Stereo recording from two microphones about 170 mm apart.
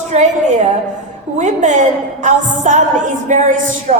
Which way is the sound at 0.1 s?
45° right (ahead or behind).